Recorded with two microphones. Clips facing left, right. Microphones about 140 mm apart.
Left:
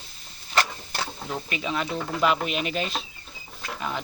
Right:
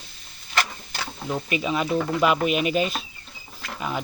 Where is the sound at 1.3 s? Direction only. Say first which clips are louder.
Right 6 dB; 5° right (ahead or behind).